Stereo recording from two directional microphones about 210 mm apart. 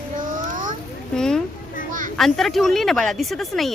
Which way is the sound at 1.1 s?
5° left (ahead or behind).